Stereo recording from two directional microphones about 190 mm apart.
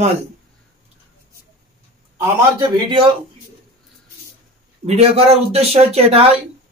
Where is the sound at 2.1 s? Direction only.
20° right (ahead or behind).